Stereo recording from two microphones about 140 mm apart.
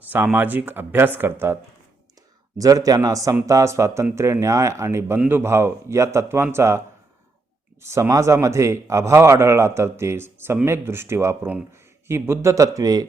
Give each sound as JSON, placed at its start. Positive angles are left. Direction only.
{"t": 0.0, "sound": "a sound", "side_deg": -10}
{"t": 0.3, "sound": "speech", "side_deg": -15}
{"t": 2.6, "sound": "speech", "side_deg": -25}